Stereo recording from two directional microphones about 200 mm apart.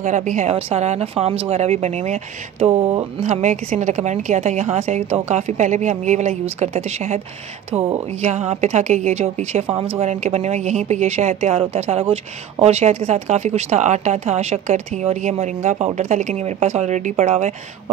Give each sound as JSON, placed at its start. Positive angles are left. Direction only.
{"t": 0.0, "sound": "speech", "side_deg": -35}